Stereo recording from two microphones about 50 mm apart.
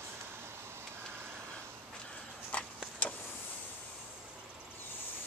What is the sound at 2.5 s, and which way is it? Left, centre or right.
Tick-tock, left.